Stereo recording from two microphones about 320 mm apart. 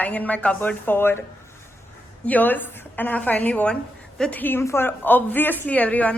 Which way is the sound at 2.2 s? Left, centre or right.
Centre.